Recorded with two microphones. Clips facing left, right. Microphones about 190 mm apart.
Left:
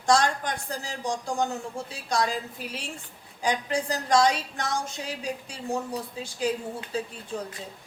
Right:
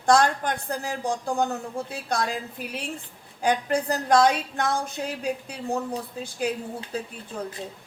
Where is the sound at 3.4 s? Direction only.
60° right (ahead or behind).